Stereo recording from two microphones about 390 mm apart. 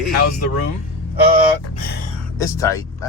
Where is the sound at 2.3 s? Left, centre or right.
Centre.